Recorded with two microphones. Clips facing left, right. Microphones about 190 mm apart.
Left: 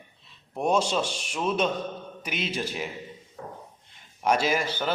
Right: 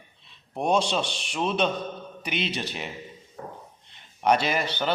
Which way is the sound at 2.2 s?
65° right (ahead or behind).